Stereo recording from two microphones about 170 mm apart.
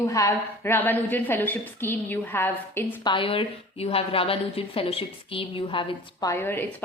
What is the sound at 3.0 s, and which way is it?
A woman's voice, 30° left (ahead or behind).